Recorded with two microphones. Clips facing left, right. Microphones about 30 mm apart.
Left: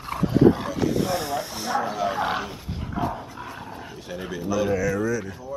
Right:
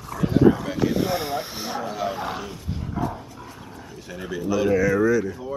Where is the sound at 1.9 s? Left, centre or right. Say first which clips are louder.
Left 2 dB; centre.